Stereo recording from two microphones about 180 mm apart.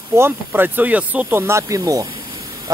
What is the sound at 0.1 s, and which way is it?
Speech, 10° right (ahead or behind).